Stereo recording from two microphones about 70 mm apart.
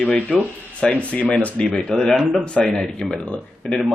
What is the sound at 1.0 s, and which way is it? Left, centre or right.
A man's voice, centre.